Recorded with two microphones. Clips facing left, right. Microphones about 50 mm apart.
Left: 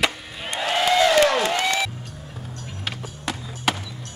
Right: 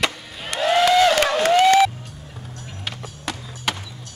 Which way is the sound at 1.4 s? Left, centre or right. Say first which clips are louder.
Right 8 dB; right.